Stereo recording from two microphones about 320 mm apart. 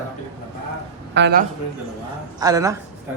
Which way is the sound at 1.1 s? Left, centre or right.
Right.